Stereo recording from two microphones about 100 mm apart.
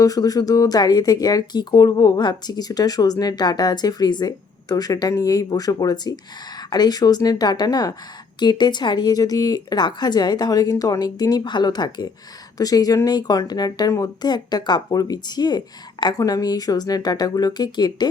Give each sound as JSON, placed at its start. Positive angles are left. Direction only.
{"t": 0.0, "sound": "speech", "side_deg": 35}